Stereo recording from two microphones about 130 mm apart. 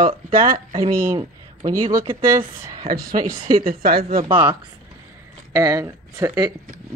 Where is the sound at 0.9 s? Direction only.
20° right (ahead or behind).